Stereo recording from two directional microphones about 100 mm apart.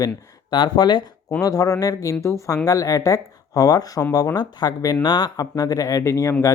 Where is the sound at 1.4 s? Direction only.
35° left (ahead or behind).